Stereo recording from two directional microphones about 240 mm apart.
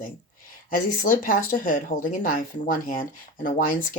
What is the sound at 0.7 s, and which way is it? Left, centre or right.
Speech, left.